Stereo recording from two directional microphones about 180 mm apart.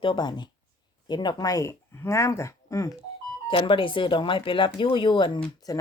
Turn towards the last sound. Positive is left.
turn(degrees=20)  # may be behind; listen again after turning